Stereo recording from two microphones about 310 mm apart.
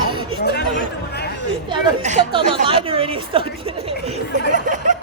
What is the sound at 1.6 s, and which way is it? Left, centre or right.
A woman's voice, right.